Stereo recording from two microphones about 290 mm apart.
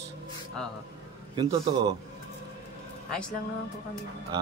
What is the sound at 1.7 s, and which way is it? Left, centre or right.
Speech, centre.